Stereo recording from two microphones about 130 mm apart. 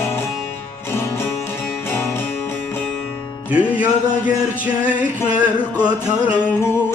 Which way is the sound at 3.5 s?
10° right (ahead or behind).